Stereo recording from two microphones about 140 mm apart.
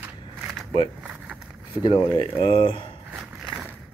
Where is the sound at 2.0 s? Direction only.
35° left (ahead or behind).